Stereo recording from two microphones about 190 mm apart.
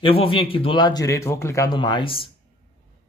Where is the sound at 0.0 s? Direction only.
30° left (ahead or behind).